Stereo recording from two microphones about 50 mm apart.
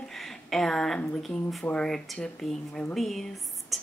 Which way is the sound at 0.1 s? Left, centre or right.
Centre.